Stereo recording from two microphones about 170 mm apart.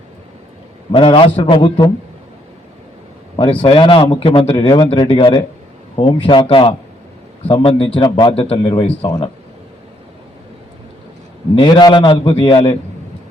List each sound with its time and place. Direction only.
0.9 s a man's voice: 30° left (ahead or behind)
3.3 s a man's voice: 30° left (ahead or behind)
11.6 s speech: 25° left (ahead or behind)